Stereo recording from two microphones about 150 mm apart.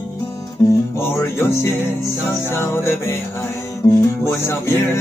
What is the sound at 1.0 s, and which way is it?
Music, 15° left (ahead or behind).